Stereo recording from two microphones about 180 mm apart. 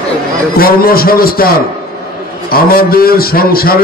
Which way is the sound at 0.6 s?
55° left (ahead or behind).